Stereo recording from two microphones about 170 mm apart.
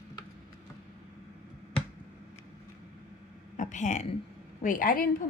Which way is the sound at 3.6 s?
45° left (ahead or behind).